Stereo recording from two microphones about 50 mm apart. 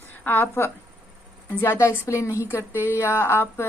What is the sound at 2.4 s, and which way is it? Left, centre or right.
Speech, left.